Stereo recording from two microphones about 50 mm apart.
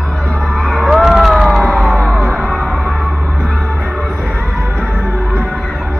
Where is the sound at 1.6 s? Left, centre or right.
Centre.